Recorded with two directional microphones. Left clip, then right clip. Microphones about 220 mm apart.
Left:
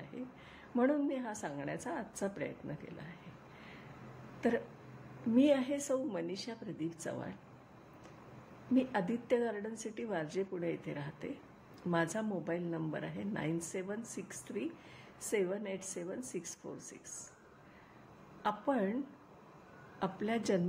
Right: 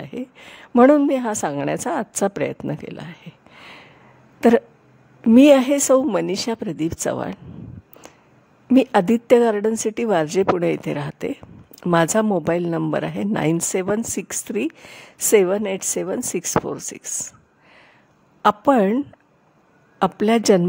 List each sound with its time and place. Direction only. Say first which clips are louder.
0.0 s a woman's voice: right 15 dB; 50° right (ahead or behind)
4.4 s a woman's voice: right 19 dB; 50° right (ahead or behind)
8.7 s a woman's voice: right 18 dB; 50° right (ahead or behind)
18.4 s a woman's voice: right 19 dB; 50° right (ahead or behind)
20.0 s a woman's voice: right 19 dB; 50° right (ahead or behind)